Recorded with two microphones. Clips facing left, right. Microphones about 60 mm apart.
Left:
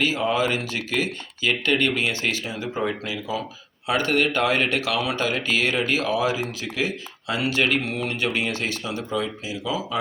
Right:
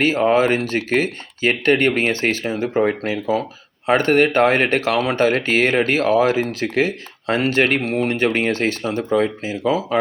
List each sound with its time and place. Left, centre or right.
0.0 s speech: right